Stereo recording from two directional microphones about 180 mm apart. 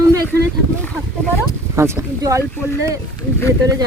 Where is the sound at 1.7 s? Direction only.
15° right (ahead or behind).